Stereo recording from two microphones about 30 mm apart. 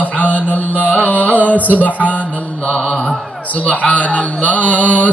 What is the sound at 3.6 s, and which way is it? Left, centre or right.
A man's voice, left.